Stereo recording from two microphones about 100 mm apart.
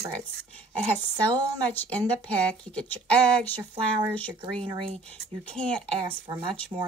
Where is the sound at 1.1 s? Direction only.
40° right (ahead or behind).